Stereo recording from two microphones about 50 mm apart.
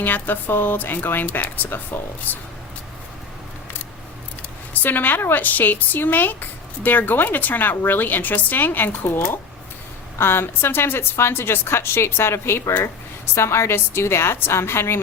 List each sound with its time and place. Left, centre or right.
0.0 s speech: left
1.6 s speech: left
4.7 s a woman's voice: left
10.2 s a woman's voice: left